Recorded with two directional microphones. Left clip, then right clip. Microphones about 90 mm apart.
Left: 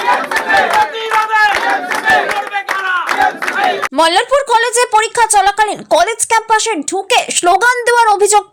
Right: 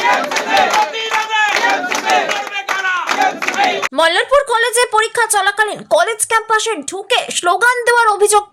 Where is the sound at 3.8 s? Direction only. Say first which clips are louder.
Left 2 dB; 25° left (ahead or behind).